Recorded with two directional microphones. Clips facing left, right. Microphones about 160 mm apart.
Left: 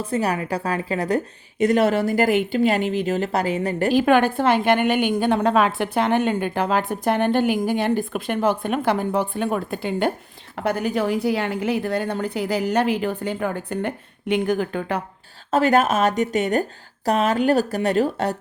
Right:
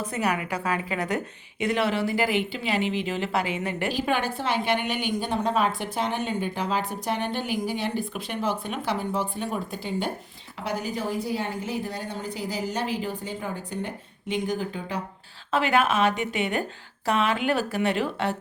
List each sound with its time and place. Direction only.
0.0 s a woman's voice: 30° left (ahead or behind)
4.0 s a woman's voice: 55° left (ahead or behind)
15.5 s a woman's voice: 40° left (ahead or behind)